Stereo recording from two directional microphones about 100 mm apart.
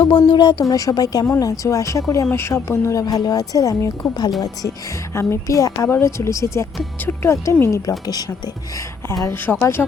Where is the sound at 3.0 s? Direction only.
40° left (ahead or behind).